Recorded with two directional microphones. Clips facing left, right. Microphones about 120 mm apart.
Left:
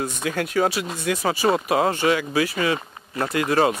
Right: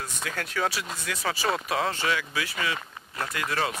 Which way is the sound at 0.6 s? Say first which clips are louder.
Left 7 dB; 55° left (ahead or behind).